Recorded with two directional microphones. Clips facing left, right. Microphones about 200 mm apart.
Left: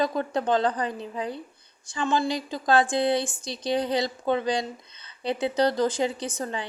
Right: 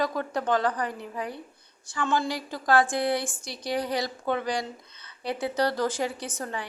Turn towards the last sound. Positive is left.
turn(degrees=20)  # may be behind; listen again after turning